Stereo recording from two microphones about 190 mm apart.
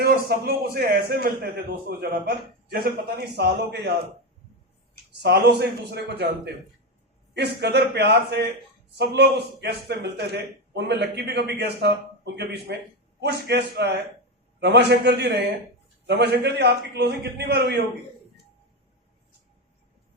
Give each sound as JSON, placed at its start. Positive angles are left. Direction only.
{"t": 0.0, "sound": "a man's voice", "side_deg": -55}
{"t": 5.2, "sound": "a man's voice", "side_deg": -60}